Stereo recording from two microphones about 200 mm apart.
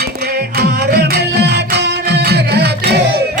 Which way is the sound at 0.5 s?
55° right (ahead or behind).